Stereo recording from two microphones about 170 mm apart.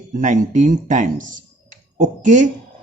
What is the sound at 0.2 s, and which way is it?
Speech, 45° right (ahead or behind).